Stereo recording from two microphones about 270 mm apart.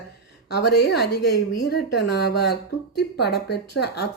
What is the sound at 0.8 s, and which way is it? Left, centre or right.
Speech, left.